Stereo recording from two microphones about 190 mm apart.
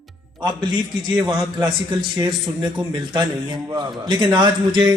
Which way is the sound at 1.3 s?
20° right (ahead or behind).